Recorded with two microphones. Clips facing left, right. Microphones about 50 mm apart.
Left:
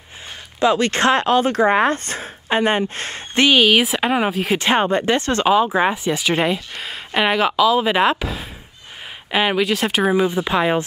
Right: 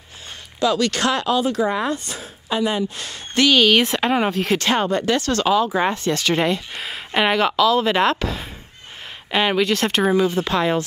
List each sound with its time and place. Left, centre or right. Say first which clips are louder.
0.6 s speech: left 3 dB; left
3.4 s speech: left 1 dB; centre
4.6 s speech: left 2 dB; left
6.7 s speech: even; centre
10.1 s speech: left 1 dB; centre